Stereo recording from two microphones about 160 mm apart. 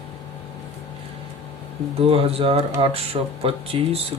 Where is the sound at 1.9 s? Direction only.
35° right (ahead or behind).